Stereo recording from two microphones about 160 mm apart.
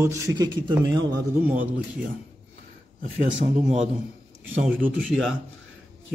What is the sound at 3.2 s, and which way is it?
Speech, 50° right (ahead or behind).